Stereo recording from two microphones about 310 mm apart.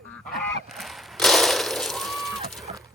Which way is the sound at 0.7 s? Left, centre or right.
Centre.